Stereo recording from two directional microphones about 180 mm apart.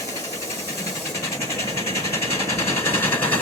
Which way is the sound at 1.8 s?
15° left (ahead or behind).